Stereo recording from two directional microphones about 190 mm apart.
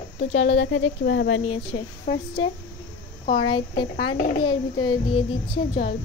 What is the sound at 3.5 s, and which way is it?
Child singing, 25° left (ahead or behind).